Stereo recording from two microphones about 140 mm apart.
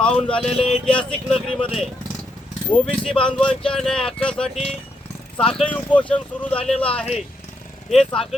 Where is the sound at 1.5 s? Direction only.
40° left (ahead or behind).